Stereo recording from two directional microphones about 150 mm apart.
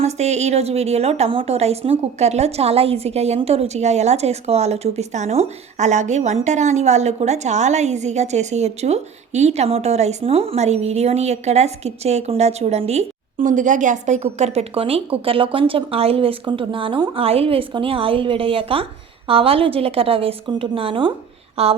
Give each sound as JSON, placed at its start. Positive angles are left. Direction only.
{"t": 0.0, "sound": "a woman's voice", "side_deg": -50}